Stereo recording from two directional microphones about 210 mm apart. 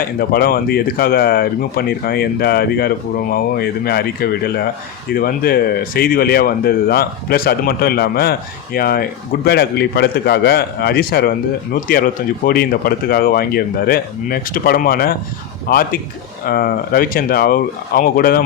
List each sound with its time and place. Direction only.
0.0 s speech: 45° left (ahead or behind)